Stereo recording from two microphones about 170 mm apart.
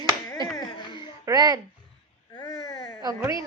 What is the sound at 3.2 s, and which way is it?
Speech, 20° right (ahead or behind).